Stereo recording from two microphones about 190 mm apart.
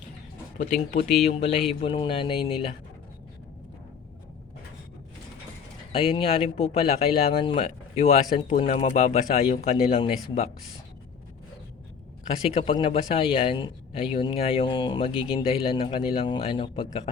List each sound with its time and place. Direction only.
0.6 s a man's voice: 40° left (ahead or behind)
5.9 s speech: 30° left (ahead or behind)
12.5 s a man's voice: 30° left (ahead or behind)